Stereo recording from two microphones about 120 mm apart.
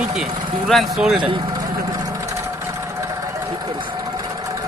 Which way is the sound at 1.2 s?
40° right (ahead or behind).